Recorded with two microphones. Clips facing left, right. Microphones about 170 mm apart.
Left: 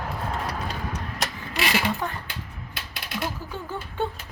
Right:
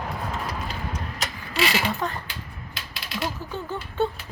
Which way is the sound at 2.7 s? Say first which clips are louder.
Left 1 dB; 55° left (ahead or behind).